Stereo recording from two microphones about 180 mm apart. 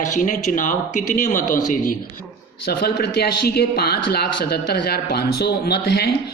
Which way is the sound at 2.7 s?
60° left (ahead or behind).